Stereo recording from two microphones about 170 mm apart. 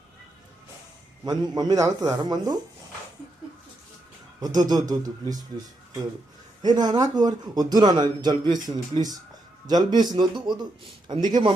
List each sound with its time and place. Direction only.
1.2 s a man's voice: 25° right (ahead or behind)
4.4 s a man's voice: 25° right (ahead or behind)
6.7 s a man's voice: 25° right (ahead or behind)